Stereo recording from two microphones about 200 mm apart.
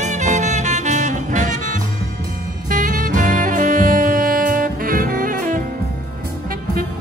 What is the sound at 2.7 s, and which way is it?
Music, 40° right (ahead or behind).